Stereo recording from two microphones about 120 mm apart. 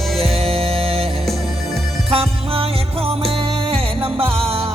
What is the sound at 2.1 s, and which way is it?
Music, 55° right (ahead or behind).